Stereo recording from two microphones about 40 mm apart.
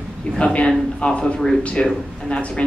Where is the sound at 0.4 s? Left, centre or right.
Left.